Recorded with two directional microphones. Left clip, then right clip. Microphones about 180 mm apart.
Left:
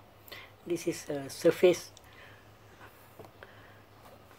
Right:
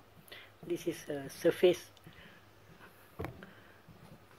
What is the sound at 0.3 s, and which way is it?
Speech, centre (ahead or behind).